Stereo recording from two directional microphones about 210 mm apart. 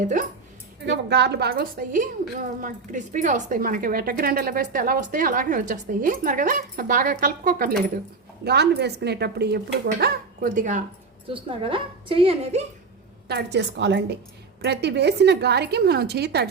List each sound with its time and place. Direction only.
0.0 s speech: 40° right (ahead or behind)
0.9 s speech: 55° right (ahead or behind); by 10.8 s 40° right (ahead or behind)
11.3 s a woman's voice: 25° right (ahead or behind)
13.2 s a woman's voice: 55° right (ahead or behind)